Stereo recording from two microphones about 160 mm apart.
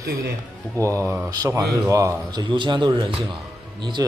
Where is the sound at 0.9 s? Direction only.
15° right (ahead or behind).